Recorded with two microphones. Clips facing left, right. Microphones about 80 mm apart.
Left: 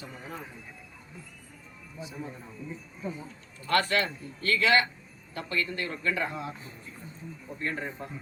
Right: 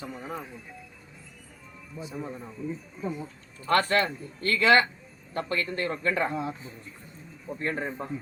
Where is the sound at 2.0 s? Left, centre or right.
Right.